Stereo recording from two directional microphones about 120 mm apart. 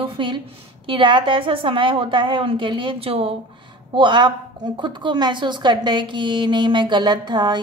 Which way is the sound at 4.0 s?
40° right (ahead or behind).